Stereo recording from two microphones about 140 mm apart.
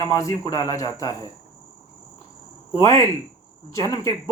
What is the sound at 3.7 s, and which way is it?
Speech, 25° left (ahead or behind).